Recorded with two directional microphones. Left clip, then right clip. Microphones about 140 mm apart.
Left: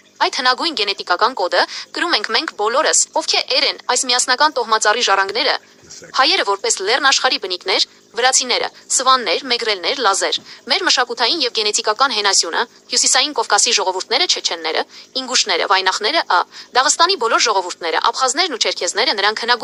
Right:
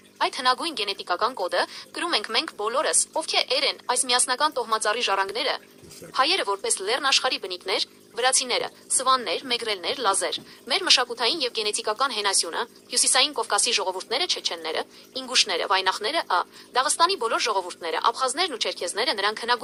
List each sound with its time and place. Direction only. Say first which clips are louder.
0.2 s speech: left 7 dB; 40° left (ahead or behind)